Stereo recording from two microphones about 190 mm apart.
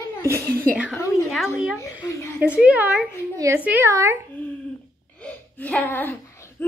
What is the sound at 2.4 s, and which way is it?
A woman's voice, 5° right (ahead or behind).